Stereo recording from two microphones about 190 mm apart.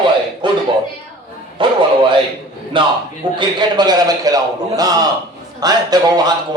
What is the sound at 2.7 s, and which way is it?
Speech, 25° right (ahead or behind).